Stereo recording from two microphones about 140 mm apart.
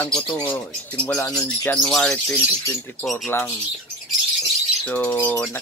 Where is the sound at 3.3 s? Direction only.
15° left (ahead or behind).